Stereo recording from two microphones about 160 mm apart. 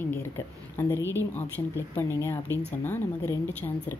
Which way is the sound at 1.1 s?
10° left (ahead or behind).